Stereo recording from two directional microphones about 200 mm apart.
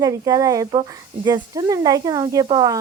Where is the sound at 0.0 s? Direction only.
20° right (ahead or behind).